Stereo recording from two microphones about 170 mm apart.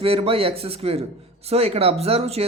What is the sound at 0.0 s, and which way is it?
Speech, 35° right (ahead or behind).